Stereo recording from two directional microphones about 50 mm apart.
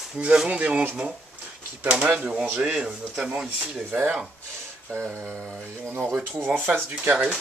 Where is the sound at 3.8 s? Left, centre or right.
Right.